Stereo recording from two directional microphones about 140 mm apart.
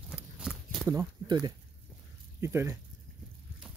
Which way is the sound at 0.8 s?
25° right (ahead or behind).